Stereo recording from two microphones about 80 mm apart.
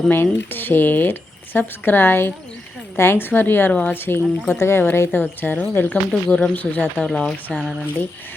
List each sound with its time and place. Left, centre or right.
0.1 s speech: left
3.7 s speech: centre
3.9 s speech: left
6.1 s speech: centre
7.0 s speech: centre
7.5 s speech: centre